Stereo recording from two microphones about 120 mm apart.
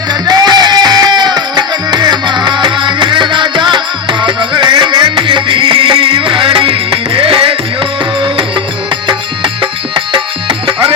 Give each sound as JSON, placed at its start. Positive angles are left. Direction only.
{"t": 0.1, "sound": "music", "side_deg": -35}